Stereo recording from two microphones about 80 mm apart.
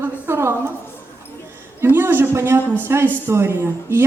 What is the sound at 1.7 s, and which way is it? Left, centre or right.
Speech, right.